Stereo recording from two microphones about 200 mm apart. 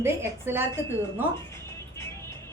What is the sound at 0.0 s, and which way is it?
Speech, 10° right (ahead or behind).